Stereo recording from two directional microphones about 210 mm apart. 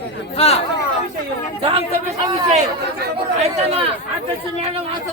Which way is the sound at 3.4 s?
30° right (ahead or behind).